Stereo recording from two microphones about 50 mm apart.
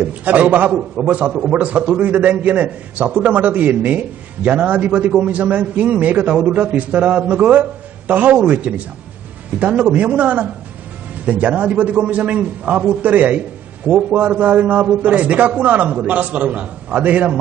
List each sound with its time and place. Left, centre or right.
0.0 s a man's voice: right